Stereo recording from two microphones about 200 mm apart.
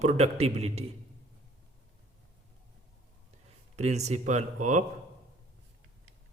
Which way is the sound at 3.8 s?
35° right (ahead or behind).